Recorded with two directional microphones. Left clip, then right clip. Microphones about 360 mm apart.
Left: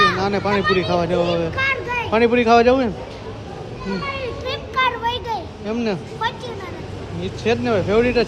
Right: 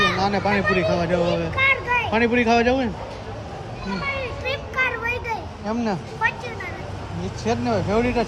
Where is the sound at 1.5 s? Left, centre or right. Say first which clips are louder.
Right 1 dB; centre.